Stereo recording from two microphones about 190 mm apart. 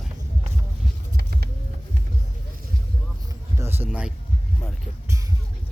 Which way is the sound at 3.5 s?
15° right (ahead or behind).